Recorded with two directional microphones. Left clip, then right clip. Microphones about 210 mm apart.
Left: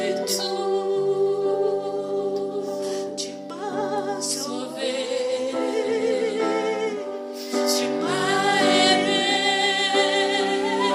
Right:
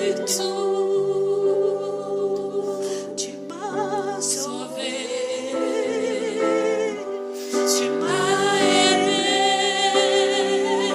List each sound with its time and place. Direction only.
5.7 s music: 40° right (ahead or behind)